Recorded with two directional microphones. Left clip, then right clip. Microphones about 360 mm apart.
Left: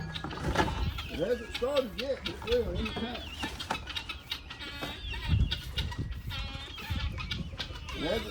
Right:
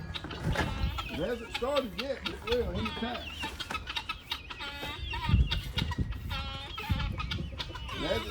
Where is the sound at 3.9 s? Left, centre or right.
Centre.